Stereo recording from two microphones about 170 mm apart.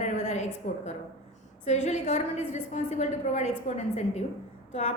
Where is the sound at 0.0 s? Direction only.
40° left (ahead or behind).